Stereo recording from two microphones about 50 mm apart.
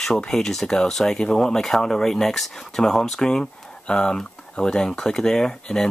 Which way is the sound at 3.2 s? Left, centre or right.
Centre.